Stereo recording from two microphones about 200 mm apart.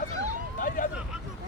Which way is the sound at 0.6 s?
40° left (ahead or behind).